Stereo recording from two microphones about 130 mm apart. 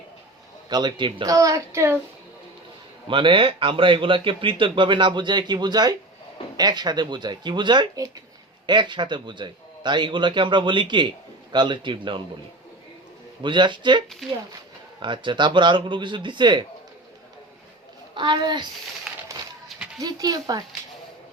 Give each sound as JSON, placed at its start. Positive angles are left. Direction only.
{"t": 0.7, "sound": "a woman's voice", "side_deg": -35}
{"t": 3.1, "sound": "speech", "side_deg": -40}
{"t": 13.4, "sound": "speech", "side_deg": -35}
{"t": 15.0, "sound": "speech", "side_deg": -40}
{"t": 18.1, "sound": "speech", "side_deg": -35}
{"t": 19.1, "sound": "a sound", "side_deg": -5}
{"t": 20.0, "sound": "a woman's voice", "side_deg": -30}